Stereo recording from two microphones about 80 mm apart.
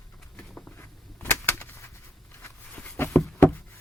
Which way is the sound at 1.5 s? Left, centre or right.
Left.